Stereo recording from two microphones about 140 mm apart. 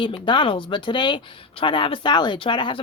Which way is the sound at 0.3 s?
35° left (ahead or behind).